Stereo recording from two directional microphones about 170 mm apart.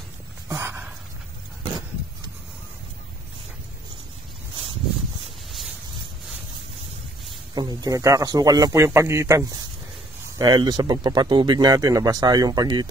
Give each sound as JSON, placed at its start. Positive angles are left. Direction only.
{"t": 0.5, "sound": "dog", "side_deg": -15}
{"t": 7.5, "sound": "speech", "side_deg": -20}